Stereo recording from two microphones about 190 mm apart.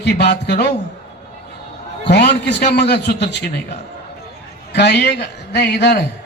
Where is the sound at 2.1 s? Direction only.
60° left (ahead or behind).